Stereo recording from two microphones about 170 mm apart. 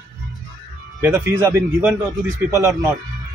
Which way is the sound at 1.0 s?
15° right (ahead or behind).